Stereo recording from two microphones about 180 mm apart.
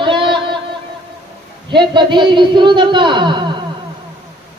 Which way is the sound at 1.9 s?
25° right (ahead or behind).